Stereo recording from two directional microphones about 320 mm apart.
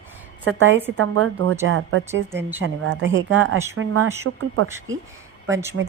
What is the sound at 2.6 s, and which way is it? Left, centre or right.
Speech, right.